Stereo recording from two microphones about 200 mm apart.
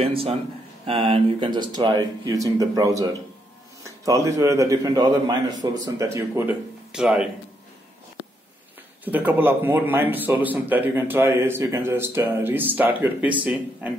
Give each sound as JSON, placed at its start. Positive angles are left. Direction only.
{"t": 0.0, "sound": "speech", "side_deg": -30}
{"t": 9.0, "sound": "speech", "side_deg": -10}